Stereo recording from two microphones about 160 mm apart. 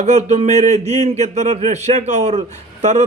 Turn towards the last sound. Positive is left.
turn(degrees=-45)  # may be behind; listen again after turning